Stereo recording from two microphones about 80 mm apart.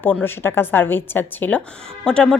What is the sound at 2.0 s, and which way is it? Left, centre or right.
Speech, centre.